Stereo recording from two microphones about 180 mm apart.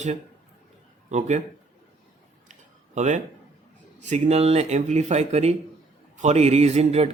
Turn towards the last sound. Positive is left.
turn(degrees=-35)  # may be behind; listen again after turning